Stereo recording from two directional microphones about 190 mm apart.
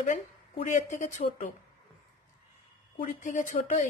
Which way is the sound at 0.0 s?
40° left (ahead or behind).